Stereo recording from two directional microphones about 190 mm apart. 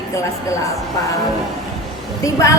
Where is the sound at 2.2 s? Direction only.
15° left (ahead or behind).